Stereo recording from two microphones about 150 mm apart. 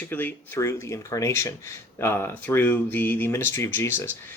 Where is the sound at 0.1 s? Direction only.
15° left (ahead or behind).